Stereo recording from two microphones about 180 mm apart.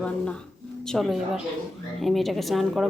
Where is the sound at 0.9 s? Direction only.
Centre (ahead or behind).